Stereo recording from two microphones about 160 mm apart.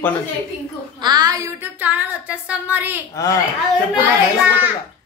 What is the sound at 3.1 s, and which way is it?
Speech, 20° left (ahead or behind).